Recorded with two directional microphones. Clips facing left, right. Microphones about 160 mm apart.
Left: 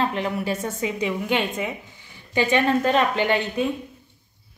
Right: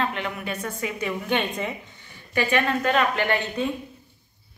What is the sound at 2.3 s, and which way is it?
Speech, 20° left (ahead or behind).